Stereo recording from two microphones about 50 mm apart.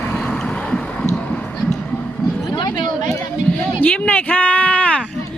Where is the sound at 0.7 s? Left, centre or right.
Centre.